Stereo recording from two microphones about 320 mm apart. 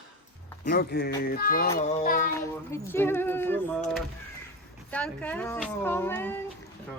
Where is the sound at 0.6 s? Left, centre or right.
Left.